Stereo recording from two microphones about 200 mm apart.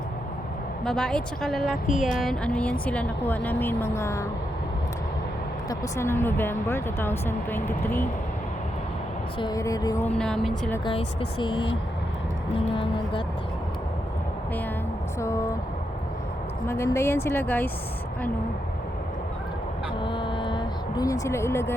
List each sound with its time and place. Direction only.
0.9 s a woman's voice: 5° left (ahead or behind)
5.6 s a woman's voice: 10° left (ahead or behind)
9.4 s a woman's voice: 20° left (ahead or behind)
10.2 s a woman's voice: 5° left (ahead or behind)
11.3 s speech: 25° left (ahead or behind)
12.7 s speech: 25° left (ahead or behind)
15.2 s a woman's voice: 15° left (ahead or behind)
16.6 s a woman's voice: 15° left (ahead or behind)
20.0 s speech: 25° left (ahead or behind)